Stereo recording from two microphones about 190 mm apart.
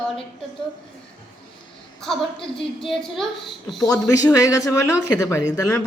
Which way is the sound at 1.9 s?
Centre (ahead or behind).